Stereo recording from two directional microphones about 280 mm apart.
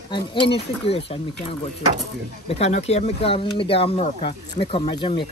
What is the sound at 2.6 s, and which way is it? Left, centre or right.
Speech, left.